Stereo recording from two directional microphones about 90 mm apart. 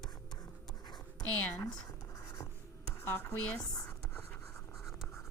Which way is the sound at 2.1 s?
35° left (ahead or behind).